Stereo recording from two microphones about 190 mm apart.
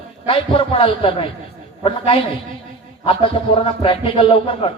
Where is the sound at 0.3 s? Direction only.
30° left (ahead or behind).